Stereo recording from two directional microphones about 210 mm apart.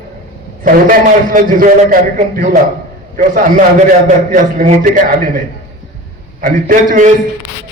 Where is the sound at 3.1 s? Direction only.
40° right (ahead or behind).